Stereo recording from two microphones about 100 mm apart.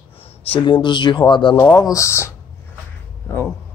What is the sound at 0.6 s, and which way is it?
Speech, 50° left (ahead or behind).